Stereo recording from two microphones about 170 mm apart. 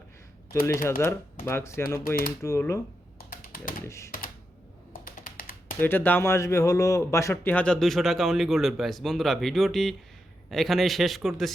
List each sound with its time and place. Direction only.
0.6 s speech: 15° left (ahead or behind)
3.4 s typing: 55° left (ahead or behind)
3.8 s speech: 15° left (ahead or behind)
5.0 s computer keyboard: 55° left (ahead or behind)
5.8 s a man's voice: 10° left (ahead or behind)